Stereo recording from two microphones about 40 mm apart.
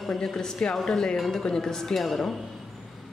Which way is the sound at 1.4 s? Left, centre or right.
Centre.